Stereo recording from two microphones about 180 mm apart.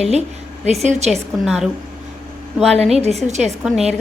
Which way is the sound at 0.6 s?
40° right (ahead or behind).